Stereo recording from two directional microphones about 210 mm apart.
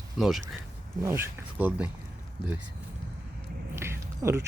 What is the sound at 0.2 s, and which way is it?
Speech, centre (ahead or behind).